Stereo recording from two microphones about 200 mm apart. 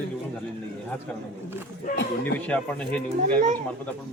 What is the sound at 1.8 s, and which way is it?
Speech, 55° left (ahead or behind).